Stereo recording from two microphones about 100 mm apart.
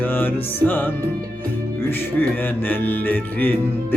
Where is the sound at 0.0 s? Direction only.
20° left (ahead or behind).